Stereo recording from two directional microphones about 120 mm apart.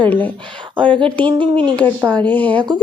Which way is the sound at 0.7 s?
40° right (ahead or behind).